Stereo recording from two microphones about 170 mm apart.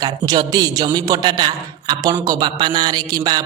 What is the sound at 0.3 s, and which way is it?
A woman's voice, 25° right (ahead or behind).